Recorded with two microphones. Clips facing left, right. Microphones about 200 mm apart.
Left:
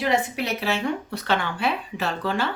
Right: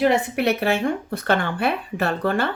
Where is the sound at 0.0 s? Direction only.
60° right (ahead or behind).